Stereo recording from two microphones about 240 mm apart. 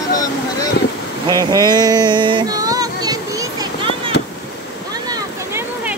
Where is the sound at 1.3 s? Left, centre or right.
Centre.